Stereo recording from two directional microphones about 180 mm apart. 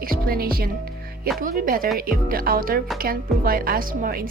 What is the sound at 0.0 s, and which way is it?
A woman's voice, 55° right (ahead or behind).